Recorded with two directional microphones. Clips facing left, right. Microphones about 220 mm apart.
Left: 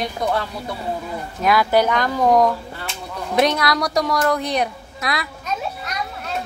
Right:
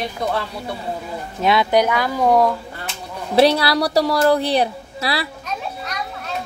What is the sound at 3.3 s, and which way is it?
Speech, 30° right (ahead or behind).